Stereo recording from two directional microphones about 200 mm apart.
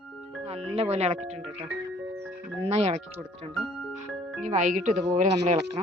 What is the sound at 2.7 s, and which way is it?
Speech, 35° right (ahead or behind).